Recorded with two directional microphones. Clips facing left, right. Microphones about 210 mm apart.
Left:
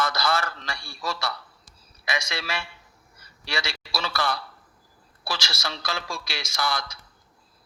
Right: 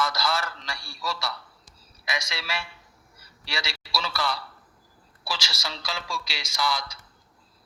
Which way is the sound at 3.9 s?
50° left (ahead or behind).